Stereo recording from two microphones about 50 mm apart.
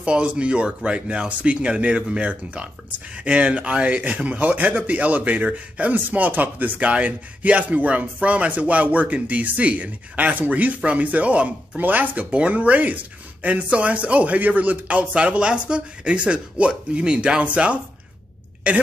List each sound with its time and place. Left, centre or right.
0.0 s a man's voice: right
12.3 s speech: right